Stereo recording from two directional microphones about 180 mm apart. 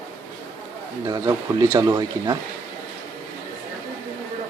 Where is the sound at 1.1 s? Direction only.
20° right (ahead or behind).